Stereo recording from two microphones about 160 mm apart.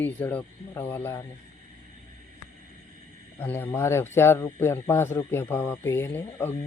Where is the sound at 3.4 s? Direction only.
15° left (ahead or behind).